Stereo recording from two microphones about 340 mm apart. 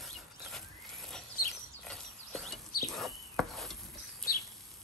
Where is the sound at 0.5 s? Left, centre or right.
Centre.